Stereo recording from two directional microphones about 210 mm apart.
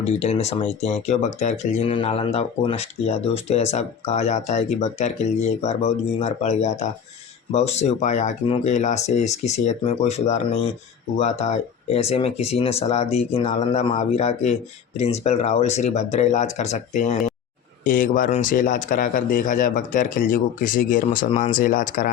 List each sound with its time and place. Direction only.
0.0 s speech: 30° left (ahead or behind)